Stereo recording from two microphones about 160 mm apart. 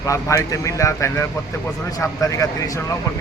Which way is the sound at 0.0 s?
20° left (ahead or behind).